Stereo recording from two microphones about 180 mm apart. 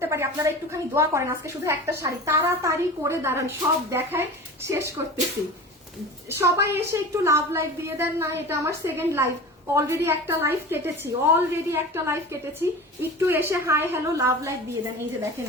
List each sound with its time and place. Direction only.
0.0 s a woman's voice: 15° right (ahead or behind)
6.4 s a woman's voice: 15° right (ahead or behind)